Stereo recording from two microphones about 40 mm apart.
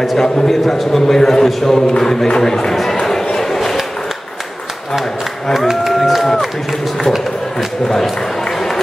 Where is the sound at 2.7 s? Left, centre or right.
Centre.